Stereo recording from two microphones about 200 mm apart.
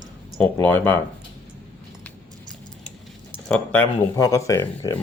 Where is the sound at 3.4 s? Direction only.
10° left (ahead or behind).